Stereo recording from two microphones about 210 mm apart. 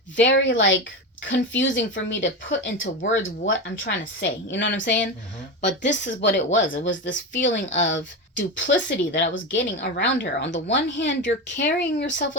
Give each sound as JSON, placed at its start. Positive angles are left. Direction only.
{"t": 0.2, "sound": "a woman's voice", "side_deg": 60}